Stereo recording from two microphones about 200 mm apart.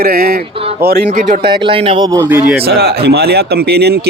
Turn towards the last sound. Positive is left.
turn(degrees=-55)  # may be behind; listen again after turning